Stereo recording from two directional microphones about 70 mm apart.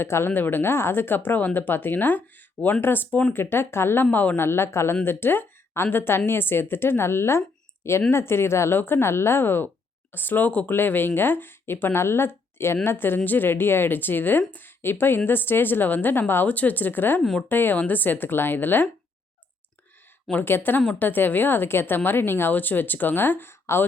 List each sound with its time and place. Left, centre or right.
0.0 s a woman's voice: left
4.4 s a woman's voice: left
20.4 s a woman's voice: left